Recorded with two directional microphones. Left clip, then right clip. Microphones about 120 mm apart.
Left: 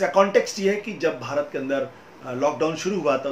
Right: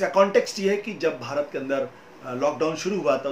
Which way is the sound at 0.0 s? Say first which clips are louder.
Left 1 dB; 20° right (ahead or behind).